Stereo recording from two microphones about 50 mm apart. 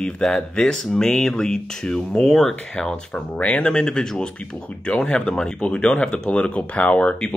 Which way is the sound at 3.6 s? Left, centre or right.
Centre.